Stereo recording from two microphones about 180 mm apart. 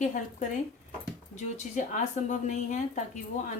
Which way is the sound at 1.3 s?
45° left (ahead or behind).